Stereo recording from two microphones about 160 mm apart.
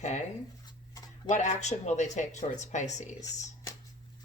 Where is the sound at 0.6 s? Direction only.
25° left (ahead or behind).